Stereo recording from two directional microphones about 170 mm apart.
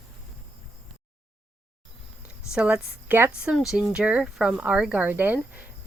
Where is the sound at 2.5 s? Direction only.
5° right (ahead or behind).